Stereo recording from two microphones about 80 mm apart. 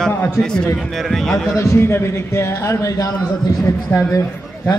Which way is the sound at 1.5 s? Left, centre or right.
Left.